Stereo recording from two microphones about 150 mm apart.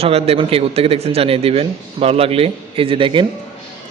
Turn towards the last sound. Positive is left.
turn(degrees=-35)  # may be behind; listen again after turning